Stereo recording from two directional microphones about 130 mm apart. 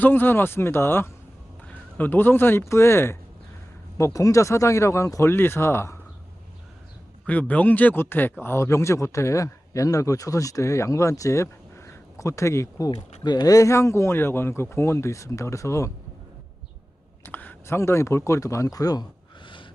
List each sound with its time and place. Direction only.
0.0 s speech: 15° left (ahead or behind)
7.3 s speech: 10° left (ahead or behind)
17.2 s speech: 15° left (ahead or behind); by 19.0 s 30° left (ahead or behind)